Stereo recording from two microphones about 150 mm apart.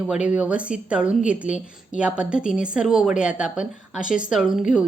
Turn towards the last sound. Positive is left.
turn(degrees=-5)  # may be behind; listen again after turning